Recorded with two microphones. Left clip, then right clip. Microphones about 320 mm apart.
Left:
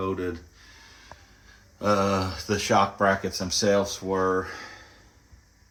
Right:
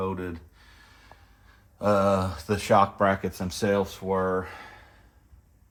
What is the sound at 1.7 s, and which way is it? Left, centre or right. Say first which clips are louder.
Speech: right 1 dB; right.